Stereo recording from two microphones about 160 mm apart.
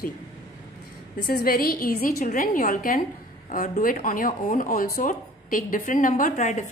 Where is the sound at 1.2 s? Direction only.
70° left (ahead or behind).